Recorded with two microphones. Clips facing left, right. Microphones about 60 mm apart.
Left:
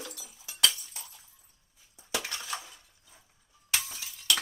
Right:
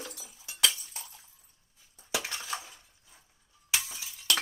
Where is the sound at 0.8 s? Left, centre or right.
Right.